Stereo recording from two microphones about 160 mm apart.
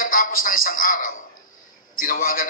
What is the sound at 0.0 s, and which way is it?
A woman's voice, 60° left (ahead or behind).